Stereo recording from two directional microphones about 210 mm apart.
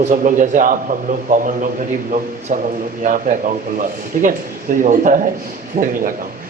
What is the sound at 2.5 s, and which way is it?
A man's voice, 35° right (ahead or behind).